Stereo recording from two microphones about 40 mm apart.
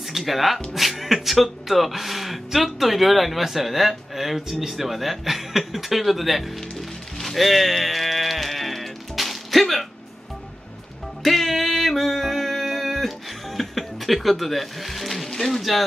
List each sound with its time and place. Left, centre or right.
0.1 s speech: centre
7.2 s music: centre
11.2 s music: centre